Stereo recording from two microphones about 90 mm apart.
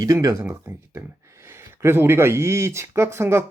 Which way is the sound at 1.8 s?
25° right (ahead or behind).